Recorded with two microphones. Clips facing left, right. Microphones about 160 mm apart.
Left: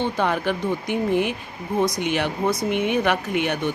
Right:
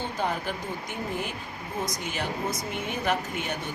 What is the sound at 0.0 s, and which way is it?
Speech, 75° left (ahead or behind).